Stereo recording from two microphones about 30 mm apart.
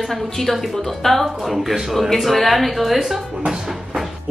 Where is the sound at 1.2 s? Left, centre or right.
Centre.